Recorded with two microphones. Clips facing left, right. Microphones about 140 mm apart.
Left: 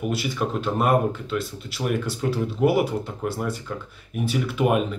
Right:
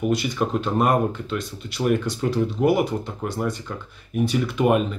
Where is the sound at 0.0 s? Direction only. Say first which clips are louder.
Right 3 dB; 5° left (ahead or behind).